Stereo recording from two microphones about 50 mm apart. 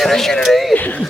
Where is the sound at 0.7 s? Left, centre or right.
Left.